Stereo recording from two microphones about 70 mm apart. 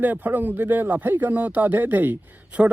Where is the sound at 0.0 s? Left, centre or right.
Right.